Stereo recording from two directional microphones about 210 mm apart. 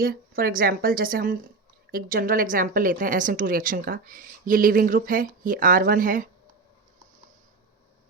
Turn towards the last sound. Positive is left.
turn(degrees=-40)  # may be behind; listen again after turning